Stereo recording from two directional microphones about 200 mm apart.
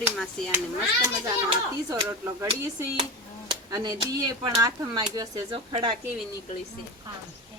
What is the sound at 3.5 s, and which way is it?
Speech, 20° right (ahead or behind).